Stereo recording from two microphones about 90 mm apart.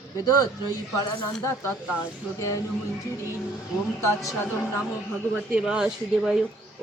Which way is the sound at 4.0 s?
35° left (ahead or behind).